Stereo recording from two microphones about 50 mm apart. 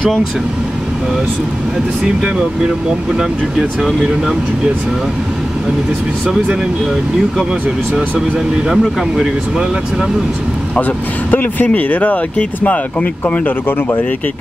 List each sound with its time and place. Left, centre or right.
3.2 s speech: centre
8.6 s speech: centre
10.8 s speech: left